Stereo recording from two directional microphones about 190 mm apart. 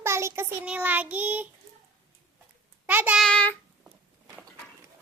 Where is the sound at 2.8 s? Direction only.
10° right (ahead or behind).